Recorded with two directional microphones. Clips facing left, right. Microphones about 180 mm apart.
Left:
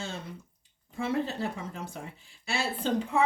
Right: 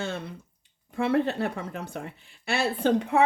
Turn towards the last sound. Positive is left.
turn(degrees=-65)  # may be behind; listen again after turning